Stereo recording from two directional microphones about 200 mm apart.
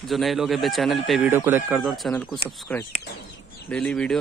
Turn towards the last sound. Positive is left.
turn(degrees=5)  # may be behind; listen again after turning